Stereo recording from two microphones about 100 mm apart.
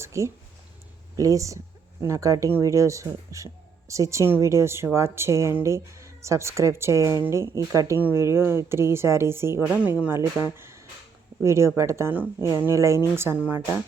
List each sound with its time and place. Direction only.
0.0 s speech: 30° right (ahead or behind)
9.7 s speech: 15° right (ahead or behind)
12.1 s speech: 15° right (ahead or behind)
12.5 s speech: 30° right (ahead or behind)